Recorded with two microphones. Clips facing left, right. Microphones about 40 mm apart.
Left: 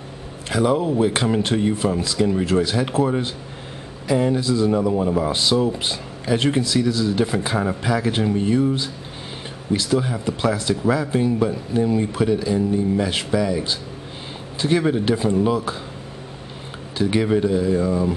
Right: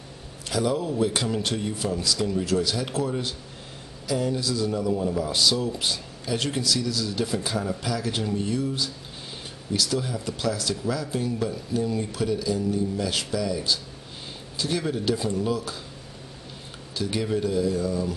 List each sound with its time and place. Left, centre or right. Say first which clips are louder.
0.5 s speech: left 6 dB; left
17.0 s speech: left 7 dB; left